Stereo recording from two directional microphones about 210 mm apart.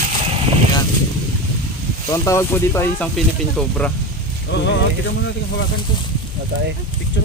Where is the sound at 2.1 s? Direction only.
15° left (ahead or behind).